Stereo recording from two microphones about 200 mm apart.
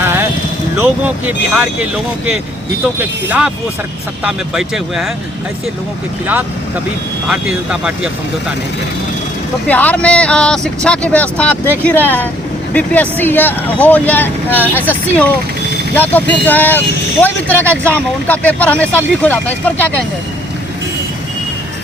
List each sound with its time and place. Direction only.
0.8 s speech: 10° right (ahead or behind)
2.8 s speech: 10° right (ahead or behind)
7.3 s speech: 5° right (ahead or behind)
9.6 s speech: 10° left (ahead or behind)